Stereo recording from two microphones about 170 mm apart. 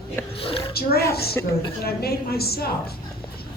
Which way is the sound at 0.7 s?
65° left (ahead or behind).